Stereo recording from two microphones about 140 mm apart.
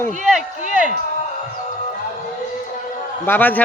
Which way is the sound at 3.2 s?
15° left (ahead or behind).